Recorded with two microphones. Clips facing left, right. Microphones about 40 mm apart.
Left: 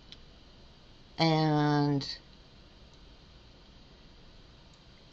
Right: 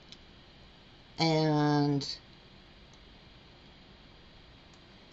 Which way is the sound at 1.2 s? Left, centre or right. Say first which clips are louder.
Left 1 dB; centre.